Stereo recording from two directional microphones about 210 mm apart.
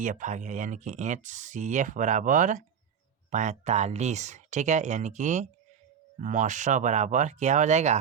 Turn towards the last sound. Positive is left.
turn(degrees=-35)  # may be behind; listen again after turning